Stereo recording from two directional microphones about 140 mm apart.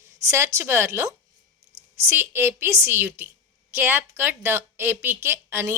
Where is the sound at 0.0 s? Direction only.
20° right (ahead or behind).